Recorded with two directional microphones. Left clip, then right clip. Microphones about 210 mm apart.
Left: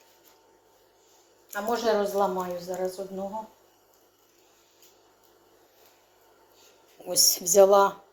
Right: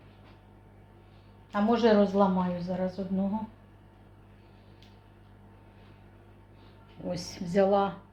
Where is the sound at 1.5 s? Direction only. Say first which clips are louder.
Right 2 dB; 15° left (ahead or behind).